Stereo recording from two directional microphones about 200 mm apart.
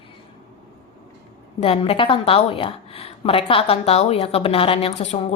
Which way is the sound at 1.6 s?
30° left (ahead or behind).